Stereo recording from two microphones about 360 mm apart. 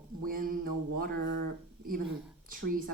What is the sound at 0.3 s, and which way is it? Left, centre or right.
Speech, right.